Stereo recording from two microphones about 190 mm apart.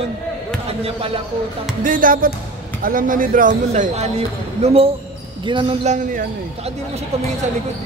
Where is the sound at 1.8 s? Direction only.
45° right (ahead or behind).